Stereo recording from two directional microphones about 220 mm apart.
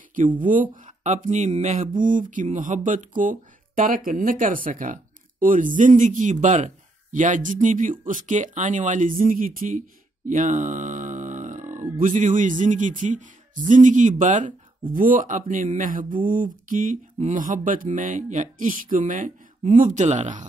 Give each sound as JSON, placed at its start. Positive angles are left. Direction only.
{"t": 0.4, "sound": "speech", "side_deg": -35}